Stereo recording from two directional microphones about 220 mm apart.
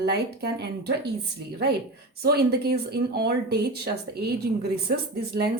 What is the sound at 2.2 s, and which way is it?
Speech, 45° right (ahead or behind).